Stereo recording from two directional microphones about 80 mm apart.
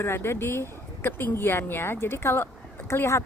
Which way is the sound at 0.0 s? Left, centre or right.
Left.